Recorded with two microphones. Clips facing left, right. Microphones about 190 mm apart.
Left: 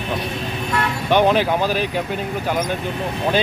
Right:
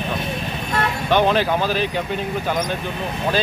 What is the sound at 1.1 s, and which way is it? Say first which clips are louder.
Speech: left 2 dB; 15° left (ahead or behind).